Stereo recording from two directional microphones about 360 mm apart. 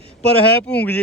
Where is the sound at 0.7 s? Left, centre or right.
Centre.